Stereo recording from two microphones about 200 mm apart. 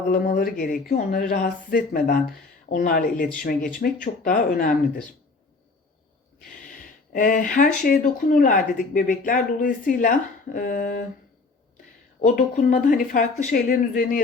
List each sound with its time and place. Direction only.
0.1 s speech: 45° left (ahead or behind)
6.8 s speech: 45° left (ahead or behind)
12.2 s speech: 40° left (ahead or behind)